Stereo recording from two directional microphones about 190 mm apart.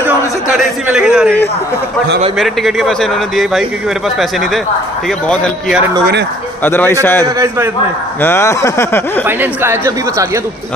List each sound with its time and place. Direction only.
0.8 s a man's voice: 5° right (ahead or behind)
2.3 s a man's voice: centre (ahead or behind)
6.6 s speech: 10° left (ahead or behind)
7.3 s speech: 15° right (ahead or behind)
8.2 s speech: 15° left (ahead or behind)
9.4 s speech: 10° right (ahead or behind)